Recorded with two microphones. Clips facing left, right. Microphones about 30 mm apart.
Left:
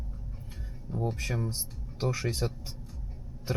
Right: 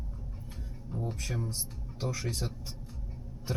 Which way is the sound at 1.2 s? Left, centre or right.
Centre.